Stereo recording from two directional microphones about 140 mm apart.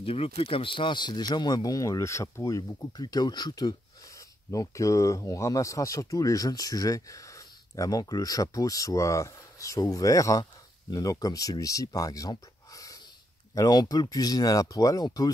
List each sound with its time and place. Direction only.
0.0 s speech: 40° left (ahead or behind)